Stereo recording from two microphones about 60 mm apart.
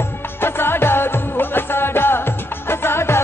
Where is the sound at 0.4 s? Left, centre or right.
Left.